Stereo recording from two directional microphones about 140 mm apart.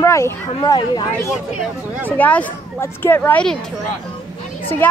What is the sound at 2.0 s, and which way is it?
Speech, 10° left (ahead or behind).